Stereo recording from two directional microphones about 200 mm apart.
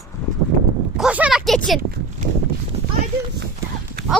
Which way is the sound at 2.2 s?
40° right (ahead or behind).